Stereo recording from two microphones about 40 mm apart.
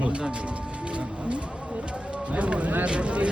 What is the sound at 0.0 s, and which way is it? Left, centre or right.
Music, right.